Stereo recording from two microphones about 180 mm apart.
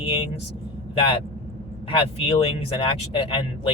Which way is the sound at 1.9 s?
30° left (ahead or behind).